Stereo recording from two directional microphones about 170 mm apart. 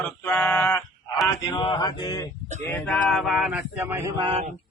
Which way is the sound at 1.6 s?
25° left (ahead or behind).